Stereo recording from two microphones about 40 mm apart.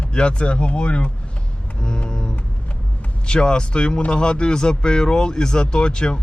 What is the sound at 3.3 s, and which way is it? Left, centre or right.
Speech, left.